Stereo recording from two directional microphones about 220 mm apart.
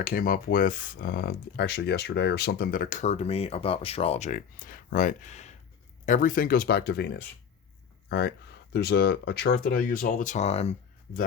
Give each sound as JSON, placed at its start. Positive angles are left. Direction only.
{"t": 0.0, "sound": "speech", "side_deg": 40}
{"t": 8.7, "sound": "speech", "side_deg": 45}